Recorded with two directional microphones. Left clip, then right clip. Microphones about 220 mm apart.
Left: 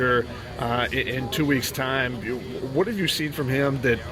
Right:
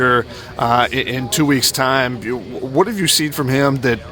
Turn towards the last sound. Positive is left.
turn(degrees=-30)  # may be behind; listen again after turning